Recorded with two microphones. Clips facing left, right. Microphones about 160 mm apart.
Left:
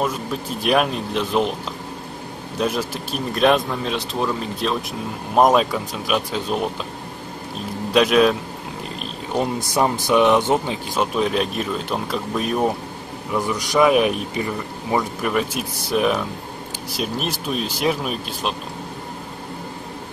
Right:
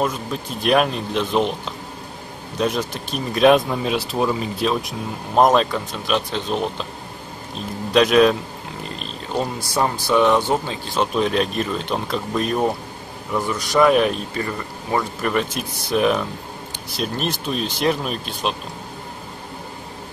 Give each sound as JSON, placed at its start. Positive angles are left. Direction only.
{"t": 0.0, "sound": "speech", "side_deg": 5}
{"t": 2.5, "sound": "speech", "side_deg": 5}
{"t": 5.3, "sound": "speech", "side_deg": 5}
{"t": 7.9, "sound": "speech", "side_deg": 5}
{"t": 9.3, "sound": "speech", "side_deg": 15}
{"t": 11.1, "sound": "speech", "side_deg": 5}
{"t": 13.5, "sound": "speech", "side_deg": 15}
{"t": 15.0, "sound": "speech", "side_deg": 5}